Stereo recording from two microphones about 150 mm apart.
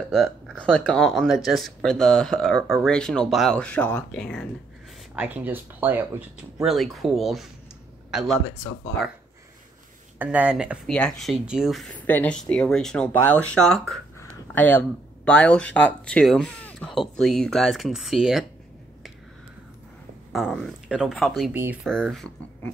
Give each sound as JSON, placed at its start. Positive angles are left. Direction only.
{"t": 0.1, "sound": "speech", "side_deg": 0}
{"t": 5.1, "sound": "speech", "side_deg": -10}
{"t": 10.1, "sound": "speech", "side_deg": -10}
{"t": 10.9, "sound": "speech", "side_deg": 5}
{"t": 14.5, "sound": "speech", "side_deg": 10}
{"t": 20.3, "sound": "speech", "side_deg": 0}